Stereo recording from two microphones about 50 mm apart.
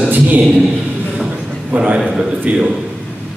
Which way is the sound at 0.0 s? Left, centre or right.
Right.